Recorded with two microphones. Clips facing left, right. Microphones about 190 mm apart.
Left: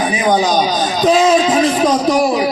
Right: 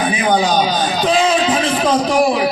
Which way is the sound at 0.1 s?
40° left (ahead or behind).